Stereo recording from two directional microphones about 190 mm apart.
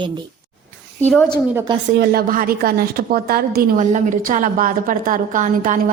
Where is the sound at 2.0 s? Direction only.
50° right (ahead or behind).